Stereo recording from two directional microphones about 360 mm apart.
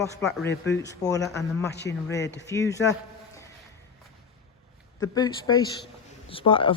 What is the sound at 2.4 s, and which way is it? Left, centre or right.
Speech, centre.